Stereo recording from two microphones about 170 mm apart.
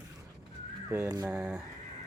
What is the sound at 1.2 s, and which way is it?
Speech, 5° right (ahead or behind).